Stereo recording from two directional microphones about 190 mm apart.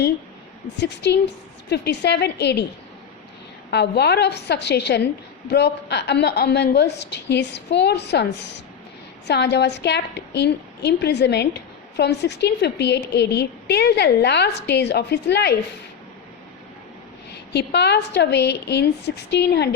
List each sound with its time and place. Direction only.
0.8 s a woman's voice: 65° left (ahead or behind)
3.7 s a woman's voice: 60° left (ahead or behind)
17.3 s a woman's voice: 65° left (ahead or behind)